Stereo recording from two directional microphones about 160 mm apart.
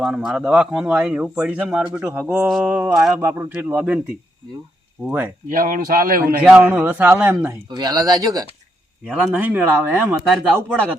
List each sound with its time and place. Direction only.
0.0 s speech: 5° right (ahead or behind)
5.0 s speech: 10° right (ahead or behind)
5.5 s a man's voice: 60° right (ahead or behind)
6.2 s speech: 10° right (ahead or behind)
7.4 s speech: 25° right (ahead or behind)
9.0 s speech: 5° right (ahead or behind)